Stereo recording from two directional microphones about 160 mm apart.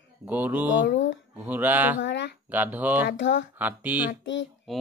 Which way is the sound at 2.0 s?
90° left.